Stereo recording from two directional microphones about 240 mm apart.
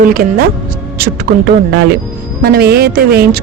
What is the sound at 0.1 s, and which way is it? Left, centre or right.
A woman's voice, right.